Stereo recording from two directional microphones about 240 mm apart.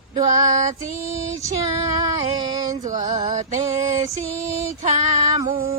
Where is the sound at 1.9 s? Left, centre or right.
Right.